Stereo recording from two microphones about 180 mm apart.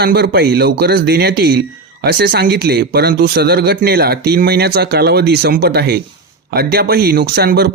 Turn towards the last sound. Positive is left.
turn(degrees=-60)  # may be behind; listen again after turning